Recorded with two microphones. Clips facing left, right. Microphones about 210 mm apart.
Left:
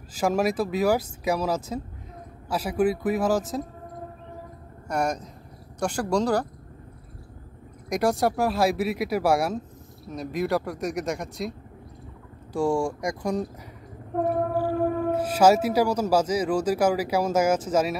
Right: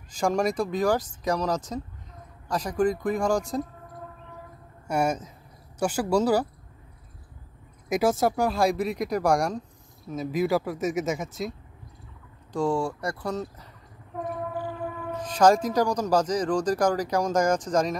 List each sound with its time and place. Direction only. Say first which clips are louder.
0.1 s speech: left 1 dB; 5° left (ahead or behind)
4.8 s speech: right 1 dB; 5° right (ahead or behind)
7.9 s speech: even; centre (ahead or behind)
12.5 s speech: left 2 dB; 10° left (ahead or behind)
14.1 s train: left 8 dB; 50° left (ahead or behind)
15.1 s speech: even; 10° left (ahead or behind)